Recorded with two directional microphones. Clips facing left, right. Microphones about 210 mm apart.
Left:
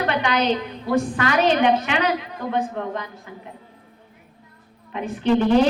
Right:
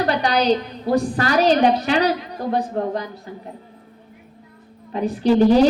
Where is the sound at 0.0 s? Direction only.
35° right (ahead or behind).